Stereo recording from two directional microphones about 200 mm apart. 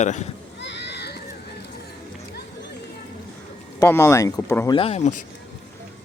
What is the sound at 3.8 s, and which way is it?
Speech, 15° left (ahead or behind).